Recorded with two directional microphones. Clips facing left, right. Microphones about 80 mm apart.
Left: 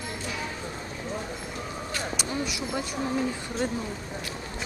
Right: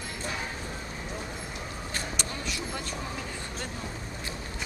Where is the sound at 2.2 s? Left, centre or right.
Centre.